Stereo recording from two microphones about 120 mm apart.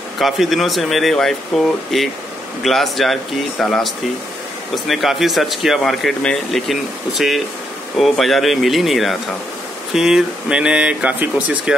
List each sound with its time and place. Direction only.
0.2 s speech: centre (ahead or behind)